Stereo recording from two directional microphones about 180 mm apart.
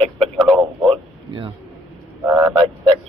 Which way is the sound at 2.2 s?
15° right (ahead or behind).